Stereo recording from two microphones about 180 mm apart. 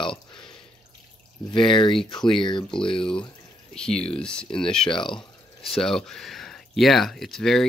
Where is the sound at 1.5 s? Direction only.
25° left (ahead or behind).